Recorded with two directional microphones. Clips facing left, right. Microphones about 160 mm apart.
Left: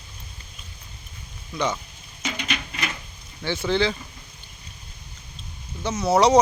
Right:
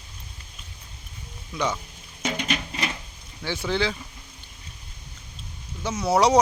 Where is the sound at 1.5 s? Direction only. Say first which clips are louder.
Left 1 dB; 5° right (ahead or behind).